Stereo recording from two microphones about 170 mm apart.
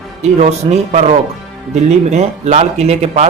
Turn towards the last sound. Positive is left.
turn(degrees=-40)  # may be behind; listen again after turning